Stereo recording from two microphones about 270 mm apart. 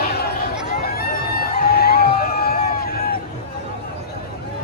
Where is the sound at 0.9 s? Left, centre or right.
Left.